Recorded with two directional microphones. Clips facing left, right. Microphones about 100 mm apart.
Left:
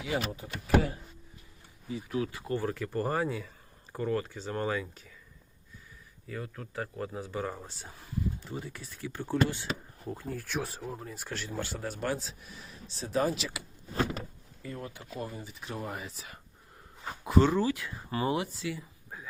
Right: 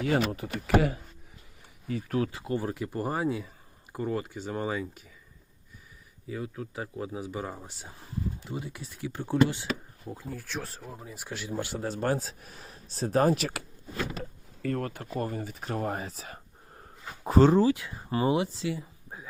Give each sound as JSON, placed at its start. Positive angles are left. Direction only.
{"t": 0.0, "sound": "speech", "side_deg": -65}
{"t": 1.9, "sound": "a man's voice", "side_deg": -45}
{"t": 2.3, "sound": "speech", "side_deg": -20}
{"t": 6.2, "sound": "speech", "side_deg": -20}
{"t": 10.1, "sound": "speech", "side_deg": 0}
{"t": 11.5, "sound": "a man's voice", "side_deg": -20}
{"t": 13.9, "sound": "a sound", "side_deg": 40}
{"t": 14.6, "sound": "a man's voice", "side_deg": -65}